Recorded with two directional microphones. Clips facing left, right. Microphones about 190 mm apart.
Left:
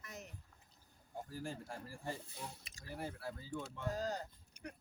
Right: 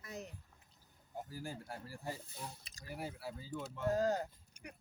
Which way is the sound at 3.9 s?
50° right (ahead or behind).